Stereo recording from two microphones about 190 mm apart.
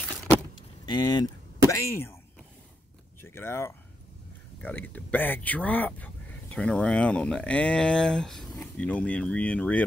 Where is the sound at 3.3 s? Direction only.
15° left (ahead or behind).